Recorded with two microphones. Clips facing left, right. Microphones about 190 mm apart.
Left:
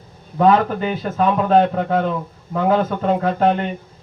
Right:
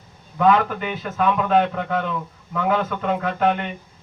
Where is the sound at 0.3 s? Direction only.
35° left (ahead or behind).